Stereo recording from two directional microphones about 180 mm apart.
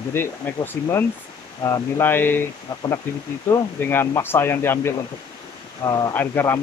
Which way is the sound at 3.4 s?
15° left (ahead or behind).